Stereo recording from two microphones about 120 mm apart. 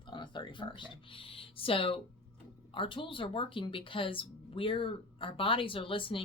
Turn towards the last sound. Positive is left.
turn(degrees=45)  # may be behind; listen again after turning